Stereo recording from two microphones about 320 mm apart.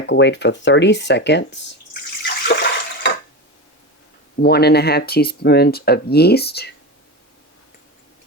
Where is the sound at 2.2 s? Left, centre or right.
Left.